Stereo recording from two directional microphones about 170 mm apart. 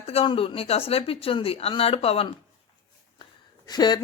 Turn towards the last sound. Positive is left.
turn(degrees=25)  # may be behind; listen again after turning